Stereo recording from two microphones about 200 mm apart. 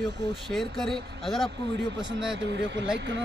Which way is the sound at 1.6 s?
60° right (ahead or behind).